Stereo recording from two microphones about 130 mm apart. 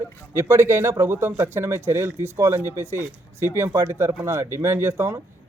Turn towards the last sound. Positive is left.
turn(degrees=-20)  # may be behind; listen again after turning